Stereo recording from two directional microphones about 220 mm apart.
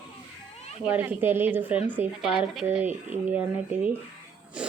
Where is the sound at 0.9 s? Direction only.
10° right (ahead or behind).